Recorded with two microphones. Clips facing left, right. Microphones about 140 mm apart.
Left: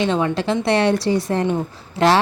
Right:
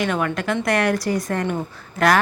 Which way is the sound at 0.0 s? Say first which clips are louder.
Left 3 dB; 25° left (ahead or behind).